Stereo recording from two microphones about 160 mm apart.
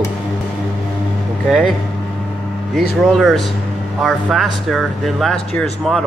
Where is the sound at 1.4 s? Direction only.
5° left (ahead or behind).